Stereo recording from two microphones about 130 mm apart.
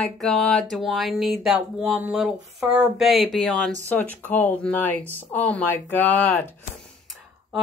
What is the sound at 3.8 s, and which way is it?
Speech, 10° left (ahead or behind).